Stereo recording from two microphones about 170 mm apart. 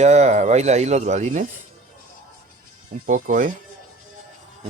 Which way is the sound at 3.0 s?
50° right (ahead or behind).